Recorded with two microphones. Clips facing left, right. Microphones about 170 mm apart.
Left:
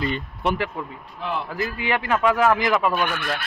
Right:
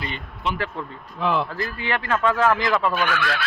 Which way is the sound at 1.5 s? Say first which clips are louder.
Left 2 dB; 15° left (ahead or behind).